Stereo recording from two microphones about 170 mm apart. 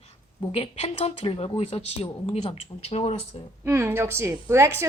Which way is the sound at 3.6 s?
15° right (ahead or behind).